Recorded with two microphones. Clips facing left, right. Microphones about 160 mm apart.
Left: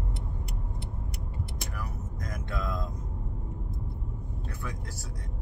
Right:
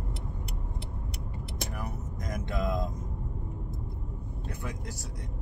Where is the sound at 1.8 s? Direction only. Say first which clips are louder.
Right 1 dB; 20° right (ahead or behind).